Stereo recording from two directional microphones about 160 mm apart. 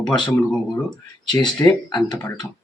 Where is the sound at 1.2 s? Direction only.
25° left (ahead or behind).